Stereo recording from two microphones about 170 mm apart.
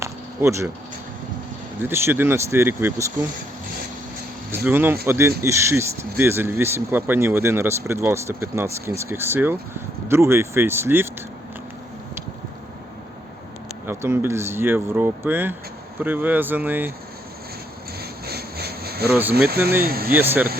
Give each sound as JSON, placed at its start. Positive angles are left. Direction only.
{"t": 0.0, "sound": "a sound", "side_deg": -15}
{"t": 1.8, "sound": "speech", "side_deg": -15}
{"t": 4.5, "sound": "speech", "side_deg": -10}
{"t": 13.8, "sound": "speech", "side_deg": -15}
{"t": 18.0, "sound": "rub", "side_deg": -65}
{"t": 19.8, "sound": "speech", "side_deg": -60}
{"t": 20.1, "sound": "speech", "side_deg": -10}